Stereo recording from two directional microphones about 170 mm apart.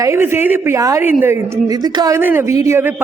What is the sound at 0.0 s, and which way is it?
A woman's voice, 15° right (ahead or behind).